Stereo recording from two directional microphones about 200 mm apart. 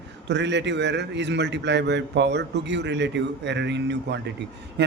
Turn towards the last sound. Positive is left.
turn(degrees=-60)  # may be behind; listen again after turning